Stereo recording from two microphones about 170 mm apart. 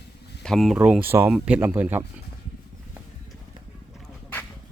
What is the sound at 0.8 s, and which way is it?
Speech, 10° right (ahead or behind).